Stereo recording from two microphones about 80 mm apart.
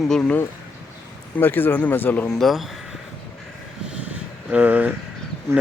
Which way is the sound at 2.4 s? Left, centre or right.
Centre.